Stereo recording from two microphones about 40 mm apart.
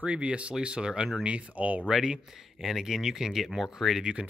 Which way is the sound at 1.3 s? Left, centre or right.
Right.